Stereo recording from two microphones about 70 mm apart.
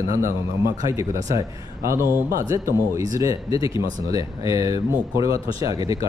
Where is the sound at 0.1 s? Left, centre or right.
Right.